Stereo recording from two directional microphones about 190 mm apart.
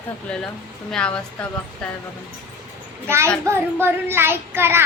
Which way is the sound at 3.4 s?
10° right (ahead or behind).